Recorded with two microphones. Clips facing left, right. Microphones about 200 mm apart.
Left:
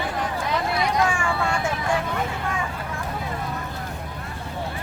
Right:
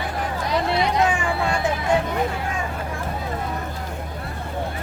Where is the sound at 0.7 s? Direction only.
20° right (ahead or behind).